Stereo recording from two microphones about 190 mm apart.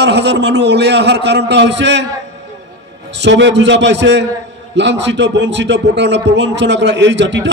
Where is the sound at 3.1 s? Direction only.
70° right (ahead or behind).